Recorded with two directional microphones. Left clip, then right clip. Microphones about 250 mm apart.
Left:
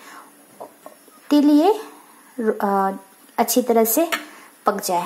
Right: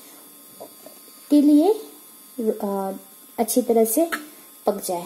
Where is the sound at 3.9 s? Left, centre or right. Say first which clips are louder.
Left 2 dB; left.